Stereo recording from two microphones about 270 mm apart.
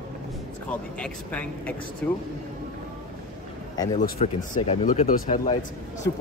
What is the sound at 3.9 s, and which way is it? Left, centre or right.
Speech, left.